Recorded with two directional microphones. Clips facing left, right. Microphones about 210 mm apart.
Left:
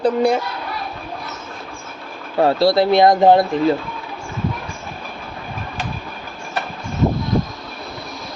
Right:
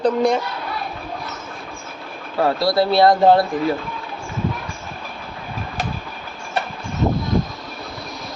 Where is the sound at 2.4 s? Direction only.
25° left (ahead or behind).